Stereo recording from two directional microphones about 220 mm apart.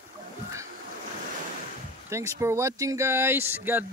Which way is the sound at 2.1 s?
10° right (ahead or behind).